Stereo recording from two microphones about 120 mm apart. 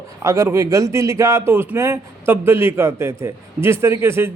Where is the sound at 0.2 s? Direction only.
25° right (ahead or behind).